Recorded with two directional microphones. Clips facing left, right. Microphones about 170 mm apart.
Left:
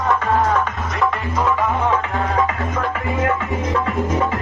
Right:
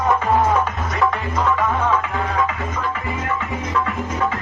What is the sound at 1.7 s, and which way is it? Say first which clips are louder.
Music: left 1 dB; 15° left (ahead or behind).